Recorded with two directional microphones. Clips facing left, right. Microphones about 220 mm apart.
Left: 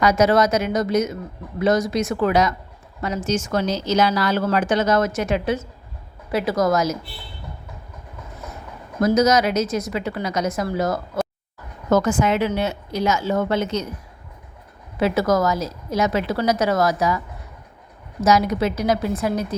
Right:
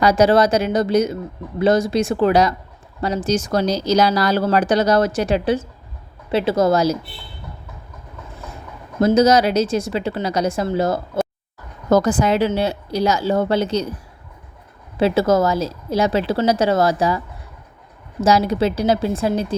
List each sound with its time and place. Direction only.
0.0 s a woman's voice: 30° right (ahead or behind)
9.0 s a woman's voice: 30° right (ahead or behind)
14.9 s speech: 30° right (ahead or behind)
18.2 s speech: 30° right (ahead or behind)